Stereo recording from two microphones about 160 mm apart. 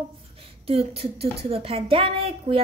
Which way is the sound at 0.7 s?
40° right (ahead or behind).